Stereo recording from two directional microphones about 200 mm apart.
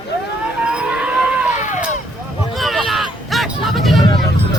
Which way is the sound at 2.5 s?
Centre (ahead or behind).